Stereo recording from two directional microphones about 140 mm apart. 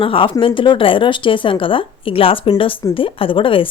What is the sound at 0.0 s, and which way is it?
A woman's voice, 40° left (ahead or behind).